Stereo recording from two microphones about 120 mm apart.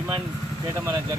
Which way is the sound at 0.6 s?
20° right (ahead or behind).